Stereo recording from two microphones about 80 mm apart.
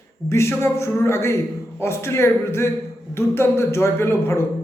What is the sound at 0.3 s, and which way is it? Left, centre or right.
A man's voice, left.